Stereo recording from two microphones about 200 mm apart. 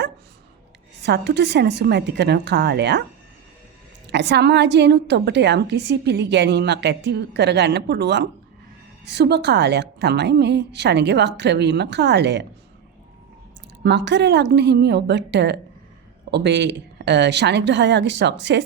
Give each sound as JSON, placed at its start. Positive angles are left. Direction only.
{"t": 1.0, "sound": "a woman's voice", "side_deg": -60}
{"t": 4.1, "sound": "a woman's voice", "side_deg": -55}
{"t": 13.8, "sound": "a woman's voice", "side_deg": -60}